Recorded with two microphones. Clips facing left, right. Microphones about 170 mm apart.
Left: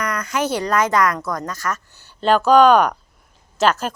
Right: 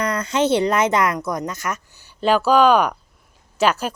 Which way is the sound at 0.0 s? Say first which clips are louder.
Right 3 dB; 30° right (ahead or behind).